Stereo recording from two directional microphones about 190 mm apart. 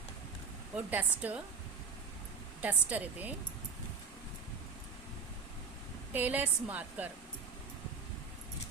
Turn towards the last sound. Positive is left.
turn(degrees=-10)  # may be behind; listen again after turning